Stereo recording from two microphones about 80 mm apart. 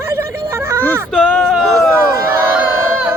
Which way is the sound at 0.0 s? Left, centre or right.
Right.